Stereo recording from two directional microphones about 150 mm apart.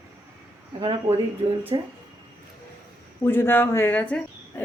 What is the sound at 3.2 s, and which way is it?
Speech, 15° left (ahead or behind).